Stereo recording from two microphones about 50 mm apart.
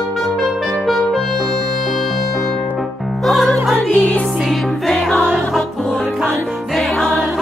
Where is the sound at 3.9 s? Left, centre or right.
Left.